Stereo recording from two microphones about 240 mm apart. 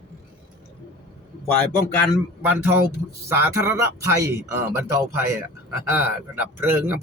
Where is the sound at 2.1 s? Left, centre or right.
Centre.